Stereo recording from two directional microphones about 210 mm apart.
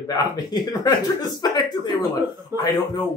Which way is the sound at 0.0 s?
20° left (ahead or behind).